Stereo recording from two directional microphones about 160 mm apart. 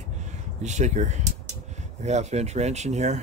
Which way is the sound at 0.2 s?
45° right (ahead or behind).